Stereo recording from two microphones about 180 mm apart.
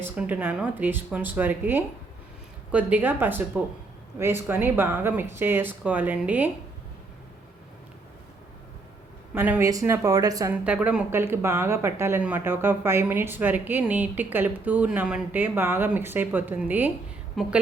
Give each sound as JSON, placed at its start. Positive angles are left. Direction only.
{"t": 0.0, "sound": "speech", "side_deg": -10}
{"t": 9.3, "sound": "a woman's voice", "side_deg": -10}
{"t": 10.5, "sound": "a woman's voice", "side_deg": -10}